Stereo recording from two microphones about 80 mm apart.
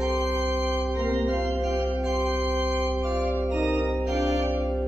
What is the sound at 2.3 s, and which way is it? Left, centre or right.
Organ, right.